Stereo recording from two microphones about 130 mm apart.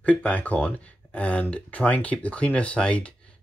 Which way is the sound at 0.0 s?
10° left (ahead or behind).